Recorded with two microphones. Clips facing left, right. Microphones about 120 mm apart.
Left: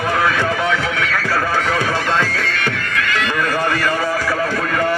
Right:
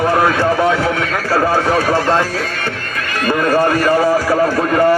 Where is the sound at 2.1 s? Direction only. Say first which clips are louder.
Right 4 dB; 25° right (ahead or behind).